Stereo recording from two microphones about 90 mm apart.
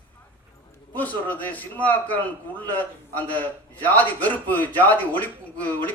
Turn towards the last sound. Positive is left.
turn(degrees=20)  # may be behind; listen again after turning